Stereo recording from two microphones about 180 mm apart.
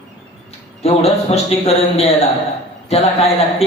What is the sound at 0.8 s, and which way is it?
A man's voice, 35° left (ahead or behind).